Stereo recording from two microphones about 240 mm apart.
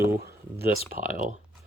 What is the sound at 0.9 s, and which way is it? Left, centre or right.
Speech, right.